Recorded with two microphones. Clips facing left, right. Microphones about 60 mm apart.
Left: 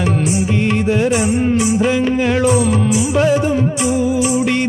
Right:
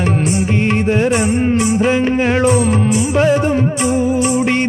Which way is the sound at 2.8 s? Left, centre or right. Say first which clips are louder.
Right 1 dB; right.